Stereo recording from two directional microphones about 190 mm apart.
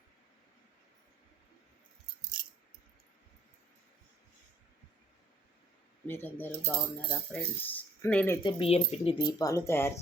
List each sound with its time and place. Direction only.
2.4 s keys jangling: 50° right (ahead or behind)
6.1 s speech: 10° left (ahead or behind)
8.4 s speech: 30° left (ahead or behind); by 10.0 s 15° left (ahead or behind)